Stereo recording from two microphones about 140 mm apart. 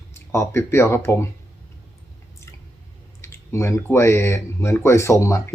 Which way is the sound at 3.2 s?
20° left (ahead or behind).